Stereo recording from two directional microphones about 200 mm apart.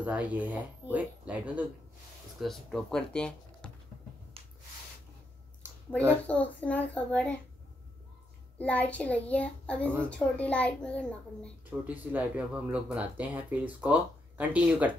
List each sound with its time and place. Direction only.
0.0 s a child's voice: 5° right (ahead or behind)
6.2 s a child's voice: 5° left (ahead or behind)
8.5 s a child's voice: 5° left (ahead or behind)
11.8 s speech: 10° right (ahead or behind)